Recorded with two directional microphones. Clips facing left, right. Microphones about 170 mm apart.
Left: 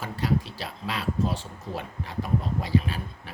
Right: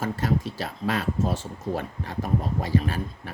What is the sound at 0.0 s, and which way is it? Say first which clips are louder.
Speech: right 2 dB; 45° right (ahead or behind).